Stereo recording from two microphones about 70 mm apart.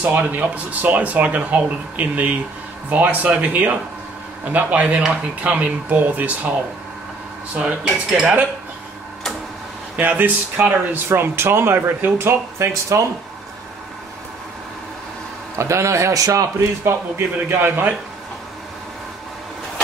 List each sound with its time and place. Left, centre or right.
0.0 s speech: right
7.5 s cutlery: centre
9.9 s speech: right
15.5 s a man's voice: right
17.5 s speech: right